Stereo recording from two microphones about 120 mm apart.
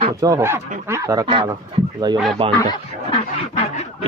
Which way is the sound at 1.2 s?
45° right (ahead or behind).